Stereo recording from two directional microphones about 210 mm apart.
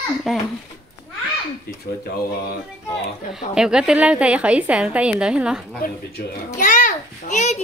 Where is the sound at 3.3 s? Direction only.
5° right (ahead or behind).